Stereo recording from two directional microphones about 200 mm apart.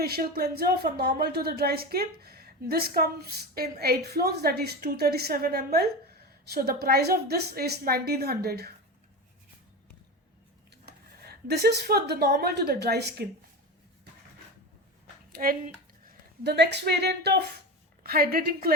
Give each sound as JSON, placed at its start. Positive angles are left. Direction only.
{"t": 0.0, "sound": "speech", "side_deg": -50}
{"t": 10.8, "sound": "speech", "side_deg": -50}
{"t": 15.3, "sound": "speech", "side_deg": -45}